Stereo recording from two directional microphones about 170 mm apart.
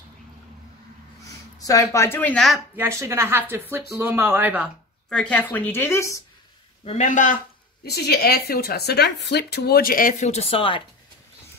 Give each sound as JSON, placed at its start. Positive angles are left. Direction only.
{"t": 1.6, "sound": "a woman's voice", "side_deg": 20}
{"t": 2.7, "sound": "a woman's voice", "side_deg": -15}
{"t": 5.1, "sound": "a woman's voice", "side_deg": 5}
{"t": 6.8, "sound": "speech", "side_deg": 40}
{"t": 7.8, "sound": "speech", "side_deg": 70}